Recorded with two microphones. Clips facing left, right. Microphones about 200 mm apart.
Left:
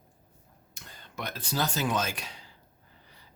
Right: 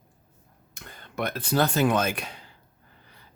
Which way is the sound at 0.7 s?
55° right (ahead or behind).